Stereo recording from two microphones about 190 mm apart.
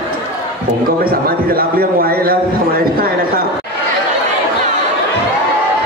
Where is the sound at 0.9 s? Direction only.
50° right (ahead or behind).